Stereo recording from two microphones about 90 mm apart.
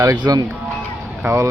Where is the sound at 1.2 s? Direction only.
35° right (ahead or behind).